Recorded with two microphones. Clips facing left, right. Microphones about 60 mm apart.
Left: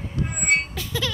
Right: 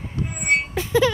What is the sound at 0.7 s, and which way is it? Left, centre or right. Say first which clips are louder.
Music: right 10 dB; right.